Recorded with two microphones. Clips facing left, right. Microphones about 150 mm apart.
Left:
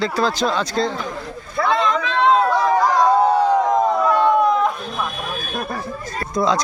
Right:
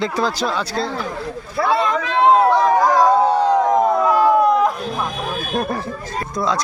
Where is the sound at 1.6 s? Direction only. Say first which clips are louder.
Right 1 dB; 5° right (ahead or behind).